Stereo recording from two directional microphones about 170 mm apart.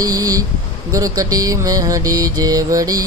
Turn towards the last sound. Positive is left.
turn(degrees=-20)  # may be behind; listen again after turning